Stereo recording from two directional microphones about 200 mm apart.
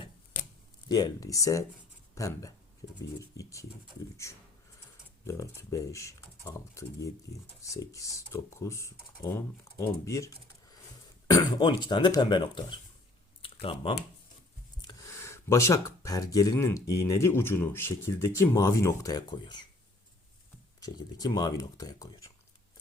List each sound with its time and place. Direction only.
0.9 s speech: 20° left (ahead or behind)
5.2 s speech: 15° left (ahead or behind)
13.4 s computer keyboard: 25° left (ahead or behind)
14.8 s a sound: 20° left (ahead or behind)
17.0 s speech: 15° left (ahead or behind)
20.8 s speech: 20° left (ahead or behind)